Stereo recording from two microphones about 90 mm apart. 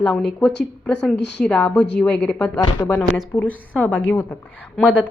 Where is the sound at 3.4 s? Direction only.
15° left (ahead or behind).